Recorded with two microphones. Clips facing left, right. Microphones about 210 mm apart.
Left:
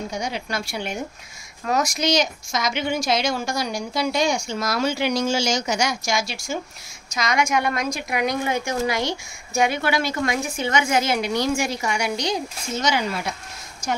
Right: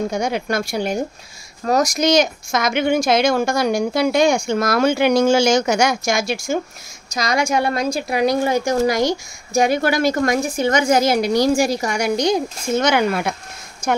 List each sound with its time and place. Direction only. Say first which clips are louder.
0.1 s a woman's voice: right 7 dB; 50° right (ahead or behind)
7.1 s a woman's voice: right 3 dB; 35° right (ahead or behind); by 13.4 s 55° right (ahead or behind)